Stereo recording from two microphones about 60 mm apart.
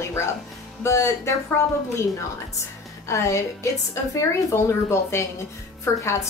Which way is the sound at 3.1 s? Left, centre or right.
Left.